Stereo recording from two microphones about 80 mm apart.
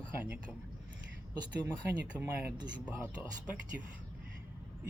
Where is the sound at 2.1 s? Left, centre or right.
Right.